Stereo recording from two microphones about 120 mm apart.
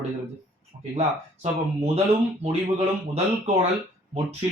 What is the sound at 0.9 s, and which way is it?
Speech, 60° right (ahead or behind).